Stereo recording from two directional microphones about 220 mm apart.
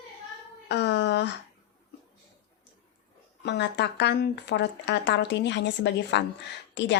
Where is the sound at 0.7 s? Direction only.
50° left (ahead or behind).